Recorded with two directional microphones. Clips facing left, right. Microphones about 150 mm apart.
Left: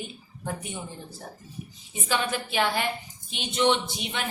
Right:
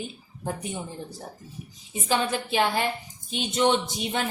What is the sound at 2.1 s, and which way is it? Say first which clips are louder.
A woman's voice: right 3 dB; 35° right (ahead or behind).